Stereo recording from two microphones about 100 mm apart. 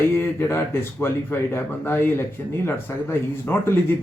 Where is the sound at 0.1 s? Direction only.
25° left (ahead or behind).